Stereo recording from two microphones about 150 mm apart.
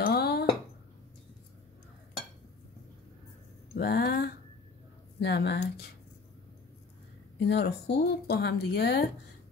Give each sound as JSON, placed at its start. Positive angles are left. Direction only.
{"t": 0.0, "sound": "dishes", "side_deg": 90}
{"t": 3.7, "sound": "a sound", "side_deg": 90}
{"t": 5.3, "sound": "speech", "side_deg": 90}
{"t": 7.4, "sound": "speech", "side_deg": 90}